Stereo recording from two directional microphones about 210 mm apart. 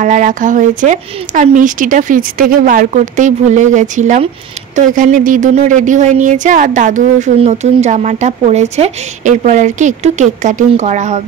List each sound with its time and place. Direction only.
0.0 s speech: 35° right (ahead or behind)